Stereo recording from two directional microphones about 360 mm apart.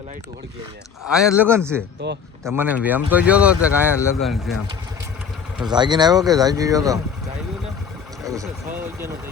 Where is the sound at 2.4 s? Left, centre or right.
Centre.